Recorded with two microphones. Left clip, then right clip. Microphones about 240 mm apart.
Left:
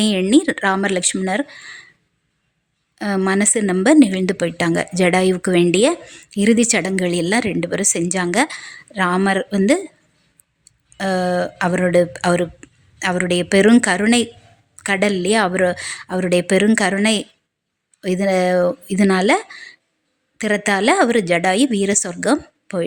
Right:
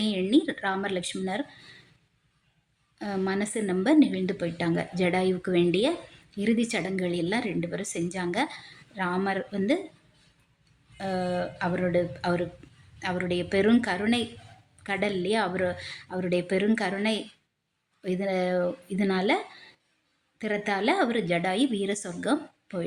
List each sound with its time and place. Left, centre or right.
0.0 s speech: left
3.0 s speech: left
10.9 s speech: left